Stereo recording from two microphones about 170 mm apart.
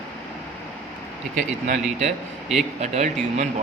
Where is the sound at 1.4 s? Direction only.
50° right (ahead or behind).